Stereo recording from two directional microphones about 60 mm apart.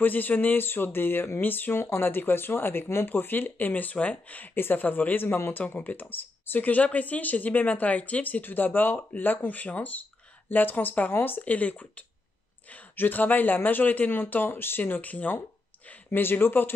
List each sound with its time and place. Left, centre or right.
0.0 s speech: left